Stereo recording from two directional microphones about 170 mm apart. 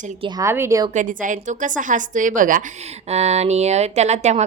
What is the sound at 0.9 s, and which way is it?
A woman's voice, 50° right (ahead or behind).